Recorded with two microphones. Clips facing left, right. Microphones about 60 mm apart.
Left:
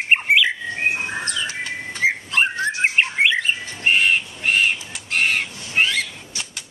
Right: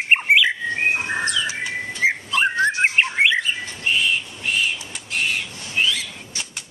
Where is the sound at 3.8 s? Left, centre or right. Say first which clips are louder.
Left 4 dB; left.